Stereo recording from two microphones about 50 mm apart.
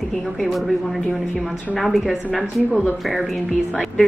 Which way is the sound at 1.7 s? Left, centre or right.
Centre.